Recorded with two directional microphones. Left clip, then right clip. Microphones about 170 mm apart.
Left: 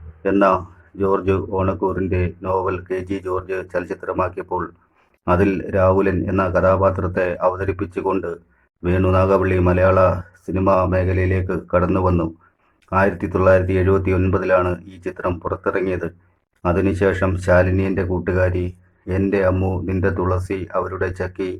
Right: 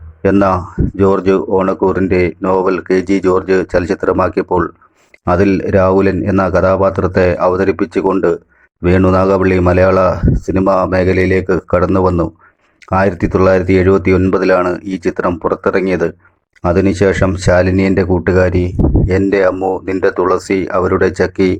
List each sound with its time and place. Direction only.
0.2 s speech: 35° right (ahead or behind)
19.5 s speech: 25° right (ahead or behind)
19.9 s speech: 40° right (ahead or behind)